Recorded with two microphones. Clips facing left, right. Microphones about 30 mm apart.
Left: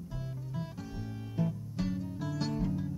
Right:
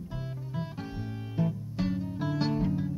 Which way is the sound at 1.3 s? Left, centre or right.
Centre.